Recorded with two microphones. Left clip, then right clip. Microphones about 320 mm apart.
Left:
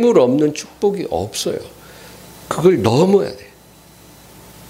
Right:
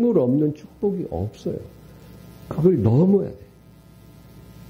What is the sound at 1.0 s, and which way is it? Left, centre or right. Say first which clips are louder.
Speech: left 9 dB; left.